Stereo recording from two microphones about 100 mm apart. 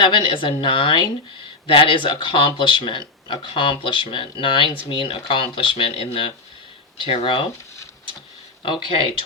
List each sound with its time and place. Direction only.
0.0 s speech: 55° left (ahead or behind)
8.6 s speech: 55° left (ahead or behind)